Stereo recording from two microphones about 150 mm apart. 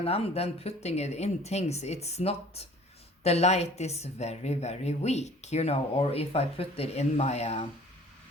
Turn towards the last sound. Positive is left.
turn(degrees=45)  # may be behind; listen again after turning